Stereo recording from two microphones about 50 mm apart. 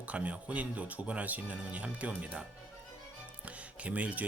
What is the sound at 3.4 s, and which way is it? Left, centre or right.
Speech, right.